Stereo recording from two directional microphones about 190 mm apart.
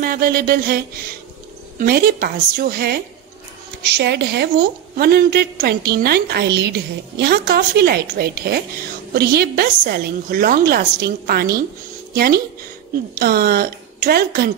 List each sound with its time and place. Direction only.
0.0 s a woman's voice: 50° right (ahead or behind)
13.1 s a woman's voice: 50° right (ahead or behind)